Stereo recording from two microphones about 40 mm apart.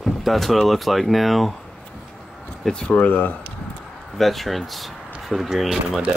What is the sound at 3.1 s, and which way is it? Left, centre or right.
Speech, left.